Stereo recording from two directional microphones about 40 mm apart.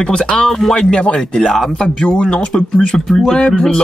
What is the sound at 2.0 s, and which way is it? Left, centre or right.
Speech, left.